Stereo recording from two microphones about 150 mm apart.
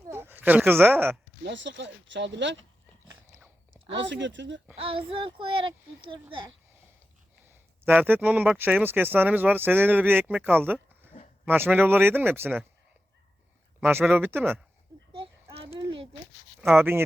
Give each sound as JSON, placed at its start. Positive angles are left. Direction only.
{"t": 0.1, "sound": "speech", "side_deg": -15}
{"t": 4.8, "sound": "a child's voice", "side_deg": -35}
{"t": 7.4, "sound": "speech", "side_deg": -15}
{"t": 13.8, "sound": "speech", "side_deg": -10}
{"t": 15.5, "sound": "a sound", "side_deg": -40}
{"t": 16.6, "sound": "speech", "side_deg": -10}